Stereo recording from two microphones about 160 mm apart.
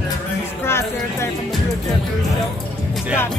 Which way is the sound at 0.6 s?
15° left (ahead or behind).